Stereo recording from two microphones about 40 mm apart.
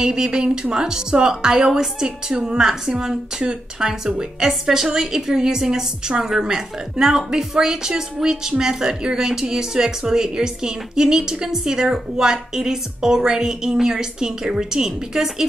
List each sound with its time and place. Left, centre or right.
0.0 s a woman's voice: centre